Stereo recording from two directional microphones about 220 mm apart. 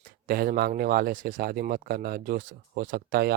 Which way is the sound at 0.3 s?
45° right (ahead or behind).